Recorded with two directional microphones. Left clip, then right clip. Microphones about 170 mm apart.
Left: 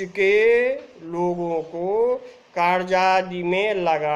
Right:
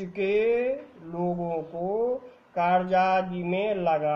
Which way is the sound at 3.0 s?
55° left (ahead or behind).